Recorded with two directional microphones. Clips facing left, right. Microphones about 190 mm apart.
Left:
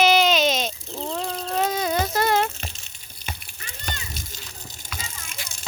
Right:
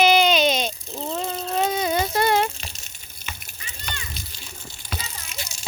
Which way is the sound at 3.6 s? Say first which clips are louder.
Right 1 dB; 45° left (ahead or behind).